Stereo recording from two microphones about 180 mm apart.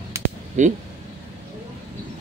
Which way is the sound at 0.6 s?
40° right (ahead or behind).